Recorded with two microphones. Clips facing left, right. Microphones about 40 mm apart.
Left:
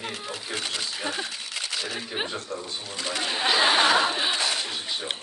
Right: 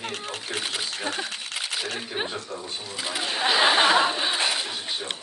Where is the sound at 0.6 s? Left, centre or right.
Centre.